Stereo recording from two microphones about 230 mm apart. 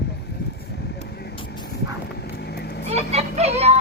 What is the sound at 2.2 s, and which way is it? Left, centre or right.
Vehicle, left.